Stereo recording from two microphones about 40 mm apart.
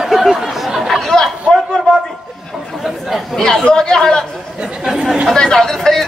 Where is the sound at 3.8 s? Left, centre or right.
Centre.